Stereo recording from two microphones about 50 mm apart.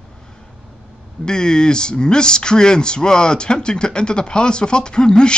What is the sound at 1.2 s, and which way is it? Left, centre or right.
Speech, centre.